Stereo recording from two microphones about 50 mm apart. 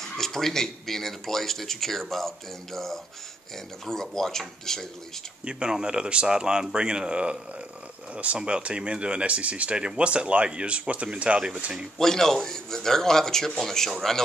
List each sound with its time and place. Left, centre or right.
0.0 s speech: centre
5.4 s speech: centre
12.0 s speech: centre